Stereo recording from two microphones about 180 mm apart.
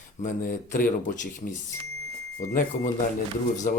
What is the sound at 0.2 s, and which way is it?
Speech, 45° left (ahead or behind).